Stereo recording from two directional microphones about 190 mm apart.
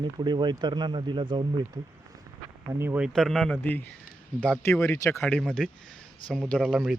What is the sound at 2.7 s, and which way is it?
Speech, 10° right (ahead or behind).